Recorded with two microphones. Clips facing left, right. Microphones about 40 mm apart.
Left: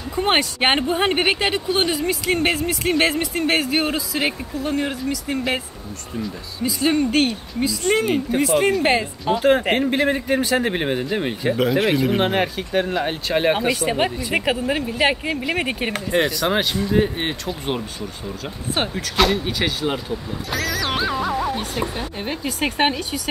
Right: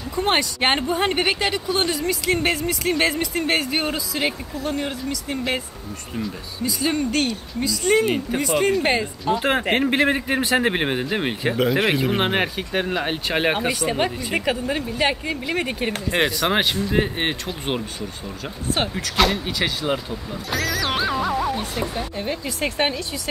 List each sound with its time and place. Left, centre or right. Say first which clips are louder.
0.1 s speech: left 2 dB; left; by 5.6 s centre
6.6 s a woman's voice: left 3 dB; centre
8.8 s speech: left 2 dB; centre
9.4 s a man's voice: left 4 dB; centre
11.5 s speech: left 2 dB; centre
13.7 s a woman's voice: left 2 dB; centre; by 16.0 s left
16.3 s a man's voice: even; centre
17.5 s speech: left 1 dB; centre
22.2 s a woman's voice: left 3 dB; left